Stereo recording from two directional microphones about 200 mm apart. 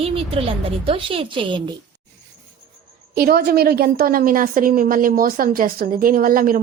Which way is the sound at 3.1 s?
50° right (ahead or behind).